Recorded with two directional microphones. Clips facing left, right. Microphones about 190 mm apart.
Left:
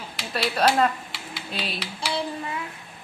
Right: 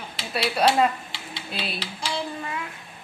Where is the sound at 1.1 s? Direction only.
25° right (ahead or behind).